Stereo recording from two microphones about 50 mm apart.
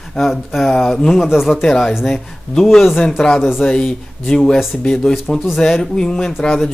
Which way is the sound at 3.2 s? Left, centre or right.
Left.